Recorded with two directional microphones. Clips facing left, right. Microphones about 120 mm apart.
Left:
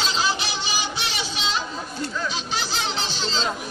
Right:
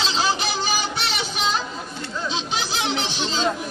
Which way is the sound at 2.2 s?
20° right (ahead or behind).